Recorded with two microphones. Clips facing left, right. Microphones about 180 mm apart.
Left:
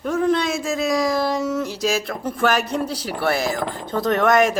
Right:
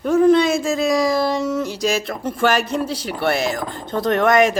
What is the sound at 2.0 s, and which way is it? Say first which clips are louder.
Speech: right 1 dB; 20° right (ahead or behind).